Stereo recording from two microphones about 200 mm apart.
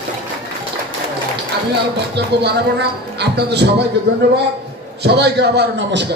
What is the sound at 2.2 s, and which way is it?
Speech, 55° right (ahead or behind).